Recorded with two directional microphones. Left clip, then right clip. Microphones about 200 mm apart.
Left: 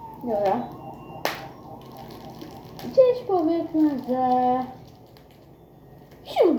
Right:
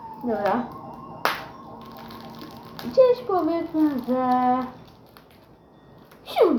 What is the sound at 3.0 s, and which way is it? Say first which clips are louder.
Speech: right 1 dB; 10° right (ahead or behind).